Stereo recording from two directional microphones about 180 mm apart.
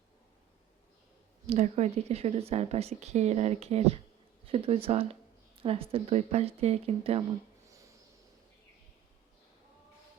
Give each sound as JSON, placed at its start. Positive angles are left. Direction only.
{"t": 1.5, "sound": "speech", "side_deg": -40}